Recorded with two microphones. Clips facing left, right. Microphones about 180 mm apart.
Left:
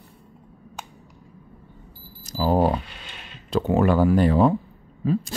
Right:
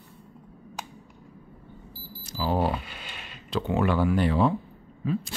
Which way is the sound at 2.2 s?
40° left (ahead or behind).